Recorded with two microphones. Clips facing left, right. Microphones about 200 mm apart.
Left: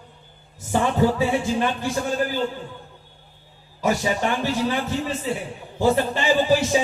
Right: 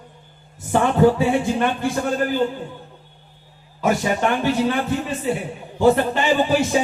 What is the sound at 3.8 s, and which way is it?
Speech, 55° right (ahead or behind).